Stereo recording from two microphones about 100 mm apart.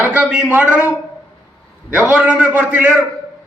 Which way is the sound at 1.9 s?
15° right (ahead or behind).